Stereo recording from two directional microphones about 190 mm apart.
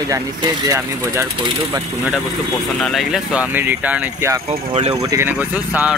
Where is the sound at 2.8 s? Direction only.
Centre (ahead or behind).